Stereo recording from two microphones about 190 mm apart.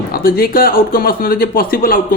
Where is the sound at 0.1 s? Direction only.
50° left (ahead or behind).